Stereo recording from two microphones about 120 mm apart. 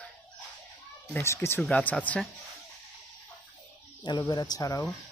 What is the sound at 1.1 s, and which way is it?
Speech, 20° left (ahead or behind).